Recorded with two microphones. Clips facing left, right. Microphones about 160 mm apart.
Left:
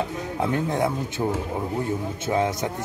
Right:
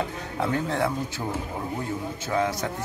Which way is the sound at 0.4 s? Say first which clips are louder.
Left 2 dB; 15° left (ahead or behind).